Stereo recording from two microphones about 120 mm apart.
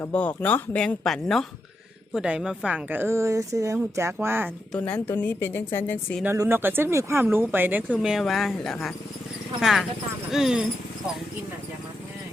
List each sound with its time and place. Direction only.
0.1 s speech: 10° left (ahead or behind); by 4.5 s 20° right (ahead or behind)
4.9 s speech: 15° left (ahead or behind)
6.2 s speech: 25° right (ahead or behind)
7.9 s speech: 5° right (ahead or behind)